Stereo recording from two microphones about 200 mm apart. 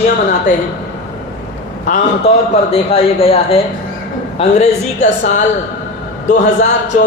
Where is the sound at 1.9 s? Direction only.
30° left (ahead or behind).